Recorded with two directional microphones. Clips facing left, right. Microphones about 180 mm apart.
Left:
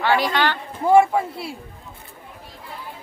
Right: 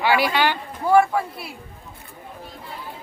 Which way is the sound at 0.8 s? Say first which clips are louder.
Left 2 dB; 25° left (ahead or behind).